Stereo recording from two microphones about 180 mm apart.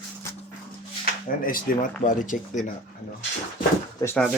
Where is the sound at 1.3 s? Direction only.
50° left (ahead or behind).